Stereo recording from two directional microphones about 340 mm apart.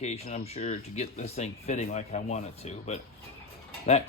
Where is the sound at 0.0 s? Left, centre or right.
Centre.